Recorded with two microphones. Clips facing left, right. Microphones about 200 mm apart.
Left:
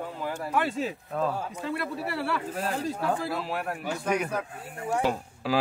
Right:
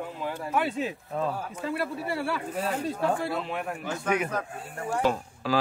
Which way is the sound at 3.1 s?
5° left (ahead or behind).